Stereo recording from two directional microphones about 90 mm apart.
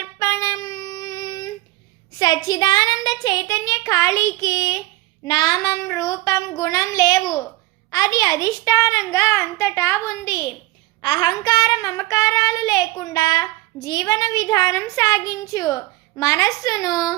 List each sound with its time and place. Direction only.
0.0 s child singing: 35° left (ahead or behind)
5.2 s a child's voice: 50° left (ahead or behind); by 10.3 s 30° left (ahead or behind)
11.0 s a child's voice: 55° left (ahead or behind)